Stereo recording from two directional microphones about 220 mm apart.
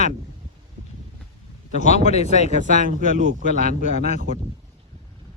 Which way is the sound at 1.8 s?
30° left (ahead or behind).